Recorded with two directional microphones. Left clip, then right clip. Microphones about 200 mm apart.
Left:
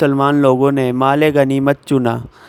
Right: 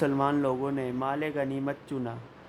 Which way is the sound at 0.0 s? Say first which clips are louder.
Left 14 dB; 45° left (ahead or behind).